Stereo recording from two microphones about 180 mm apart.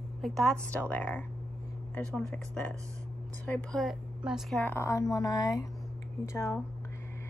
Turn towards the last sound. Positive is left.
turn(degrees=15)  # may be behind; listen again after turning